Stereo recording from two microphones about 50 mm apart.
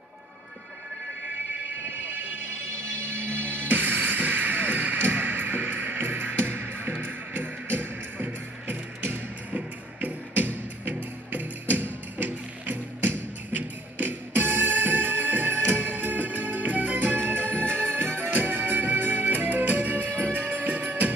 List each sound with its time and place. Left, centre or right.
3.3 s music: right